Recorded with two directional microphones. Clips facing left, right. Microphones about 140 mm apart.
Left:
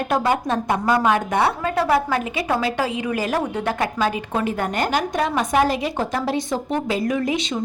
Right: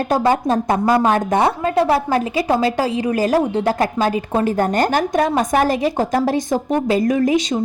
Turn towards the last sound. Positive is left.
turn(degrees=-40)  # may be behind; listen again after turning